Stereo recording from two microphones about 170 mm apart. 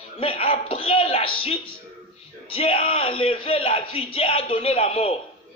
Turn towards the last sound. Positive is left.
turn(degrees=35)  # may be behind; listen again after turning